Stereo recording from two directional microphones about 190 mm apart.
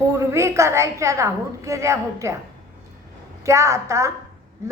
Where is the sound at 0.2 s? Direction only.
15° right (ahead or behind).